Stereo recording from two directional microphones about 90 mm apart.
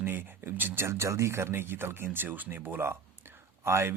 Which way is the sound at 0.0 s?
25° right (ahead or behind).